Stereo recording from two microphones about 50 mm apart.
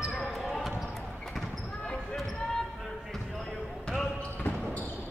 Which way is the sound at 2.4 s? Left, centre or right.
Centre.